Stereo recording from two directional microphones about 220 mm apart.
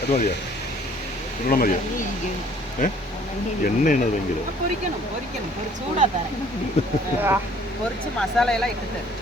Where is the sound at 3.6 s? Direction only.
35° left (ahead or behind).